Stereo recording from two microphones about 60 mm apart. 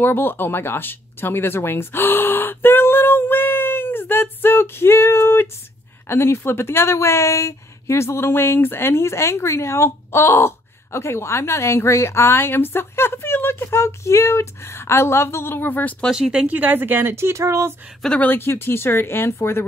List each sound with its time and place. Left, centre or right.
0.0 s speech: left
16.1 s speech: centre
16.4 s speech: right
18.2 s speech: left